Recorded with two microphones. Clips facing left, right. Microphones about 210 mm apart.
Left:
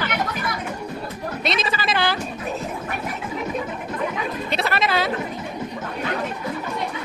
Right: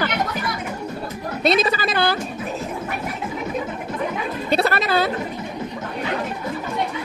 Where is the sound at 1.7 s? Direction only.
45° right (ahead or behind).